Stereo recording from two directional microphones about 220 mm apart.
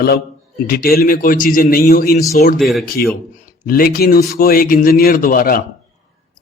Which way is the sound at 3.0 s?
45° left (ahead or behind).